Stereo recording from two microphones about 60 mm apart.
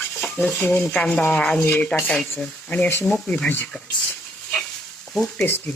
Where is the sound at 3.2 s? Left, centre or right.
Centre.